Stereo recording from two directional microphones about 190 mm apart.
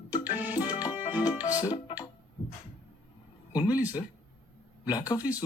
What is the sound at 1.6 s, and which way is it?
Music, 20° left (ahead or behind).